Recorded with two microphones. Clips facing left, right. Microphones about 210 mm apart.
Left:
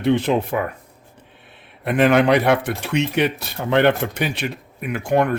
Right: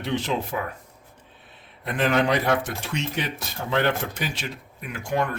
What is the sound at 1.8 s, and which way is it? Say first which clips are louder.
Speech: left 7 dB; 65° left (ahead or behind).